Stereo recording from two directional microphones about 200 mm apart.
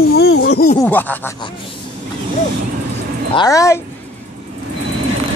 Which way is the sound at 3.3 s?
20° left (ahead or behind).